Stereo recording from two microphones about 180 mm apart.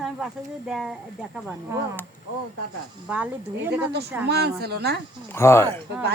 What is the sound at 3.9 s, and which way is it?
Speech, 65° right (ahead or behind).